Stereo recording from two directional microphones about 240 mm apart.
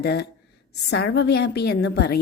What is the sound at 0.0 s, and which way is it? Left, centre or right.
A woman's voice, left.